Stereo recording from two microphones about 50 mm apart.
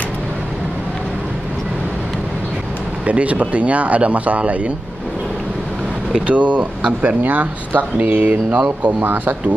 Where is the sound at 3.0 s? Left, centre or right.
Right.